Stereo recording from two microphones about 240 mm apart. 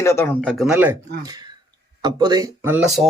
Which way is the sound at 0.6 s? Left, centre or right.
Centre.